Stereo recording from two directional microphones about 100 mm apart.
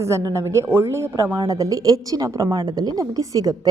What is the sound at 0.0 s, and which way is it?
A woman's voice, 30° right (ahead or behind).